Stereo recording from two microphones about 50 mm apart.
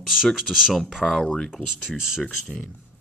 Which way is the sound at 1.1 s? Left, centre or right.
Centre.